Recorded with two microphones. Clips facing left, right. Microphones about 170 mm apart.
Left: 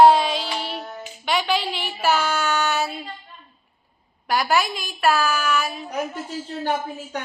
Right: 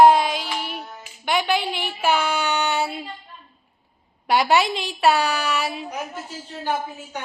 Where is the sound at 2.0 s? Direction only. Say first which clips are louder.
Even; 10° right (ahead or behind).